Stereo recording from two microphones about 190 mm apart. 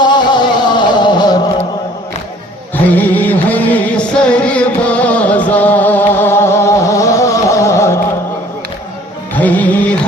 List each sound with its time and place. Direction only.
0.0 s music: 25° left (ahead or behind)
2.7 s music: 10° left (ahead or behind)
9.3 s music: 10° left (ahead or behind)